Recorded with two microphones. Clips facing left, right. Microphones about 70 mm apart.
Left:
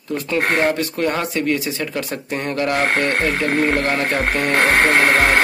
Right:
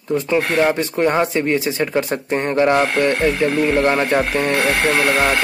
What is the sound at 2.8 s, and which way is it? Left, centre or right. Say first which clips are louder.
Speech: right 2 dB; left.